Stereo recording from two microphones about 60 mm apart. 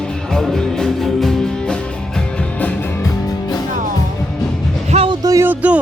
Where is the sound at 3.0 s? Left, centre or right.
Left.